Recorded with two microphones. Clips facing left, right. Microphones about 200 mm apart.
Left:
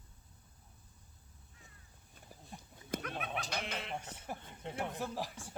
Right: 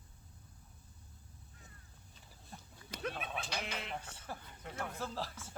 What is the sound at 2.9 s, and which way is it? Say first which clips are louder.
Goat: left 6 dB; 50° left (ahead or behind).